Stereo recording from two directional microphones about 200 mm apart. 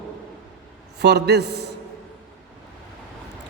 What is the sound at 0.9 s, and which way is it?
Speech, 55° right (ahead or behind).